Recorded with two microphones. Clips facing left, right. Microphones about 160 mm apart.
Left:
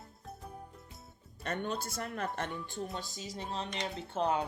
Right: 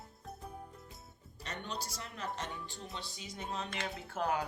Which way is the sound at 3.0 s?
40° left (ahead or behind).